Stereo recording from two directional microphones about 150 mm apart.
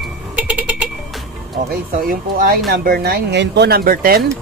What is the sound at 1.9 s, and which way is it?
Speech, 75° right (ahead or behind).